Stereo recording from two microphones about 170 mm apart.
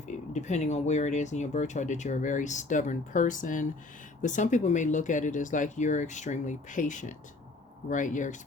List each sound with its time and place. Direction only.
0.3 s speech: 40° left (ahead or behind)